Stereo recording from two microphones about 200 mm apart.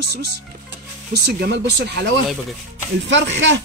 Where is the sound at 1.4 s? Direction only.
55° right (ahead or behind).